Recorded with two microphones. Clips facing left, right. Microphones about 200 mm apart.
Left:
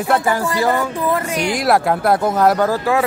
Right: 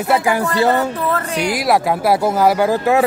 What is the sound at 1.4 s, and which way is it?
Speech, 5° right (ahead or behind).